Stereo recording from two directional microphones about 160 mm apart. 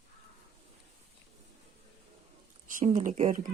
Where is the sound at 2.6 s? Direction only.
55° right (ahead or behind).